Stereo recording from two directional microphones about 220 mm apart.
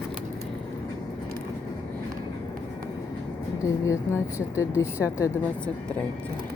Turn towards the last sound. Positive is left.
turn(degrees=15)  # may be behind; listen again after turning